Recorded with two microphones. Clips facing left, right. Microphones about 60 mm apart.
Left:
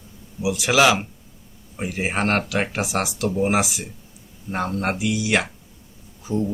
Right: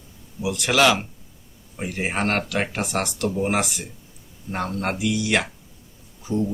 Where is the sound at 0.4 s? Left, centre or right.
Centre.